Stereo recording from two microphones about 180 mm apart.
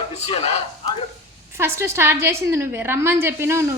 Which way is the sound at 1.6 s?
15° right (ahead or behind).